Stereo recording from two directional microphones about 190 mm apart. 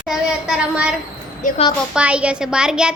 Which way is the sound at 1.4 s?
40° left (ahead or behind).